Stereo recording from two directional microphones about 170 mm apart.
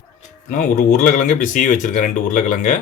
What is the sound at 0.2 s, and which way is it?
Speech, 50° left (ahead or behind).